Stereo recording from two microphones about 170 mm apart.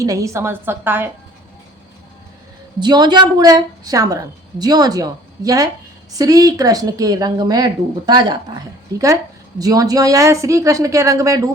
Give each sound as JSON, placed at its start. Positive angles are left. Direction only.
{"t": 0.0, "sound": "a woman's voice", "side_deg": -20}
{"t": 2.8, "sound": "a woman's voice", "side_deg": -25}